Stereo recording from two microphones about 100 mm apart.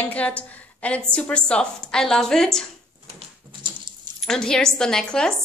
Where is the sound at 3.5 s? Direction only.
50° right (ahead or behind).